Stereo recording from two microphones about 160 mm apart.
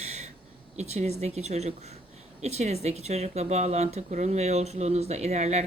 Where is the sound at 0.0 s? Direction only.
45° right (ahead or behind).